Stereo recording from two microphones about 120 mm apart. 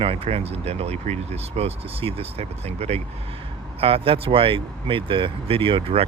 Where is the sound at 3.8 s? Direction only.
50° right (ahead or behind).